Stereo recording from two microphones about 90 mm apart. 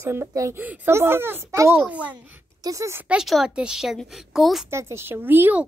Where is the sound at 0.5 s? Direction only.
20° right (ahead or behind).